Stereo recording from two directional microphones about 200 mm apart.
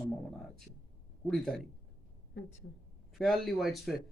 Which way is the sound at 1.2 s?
Centre (ahead or behind).